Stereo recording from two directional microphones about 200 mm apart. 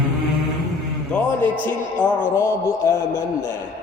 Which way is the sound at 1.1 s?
5° left (ahead or behind).